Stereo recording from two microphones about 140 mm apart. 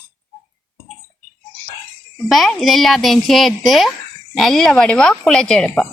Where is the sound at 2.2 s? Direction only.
Centre (ahead or behind).